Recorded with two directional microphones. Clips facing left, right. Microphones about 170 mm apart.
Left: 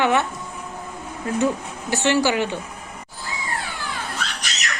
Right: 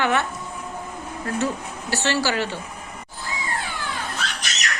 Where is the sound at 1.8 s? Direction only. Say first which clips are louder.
Left 4 dB; 20° left (ahead or behind).